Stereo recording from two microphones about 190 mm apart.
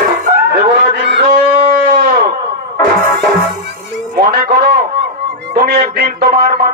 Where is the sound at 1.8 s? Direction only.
50° right (ahead or behind).